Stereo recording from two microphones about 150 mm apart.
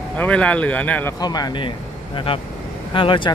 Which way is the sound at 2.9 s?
35° left (ahead or behind).